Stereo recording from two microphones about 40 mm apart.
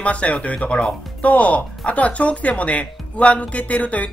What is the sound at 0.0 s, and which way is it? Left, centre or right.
Speech, left.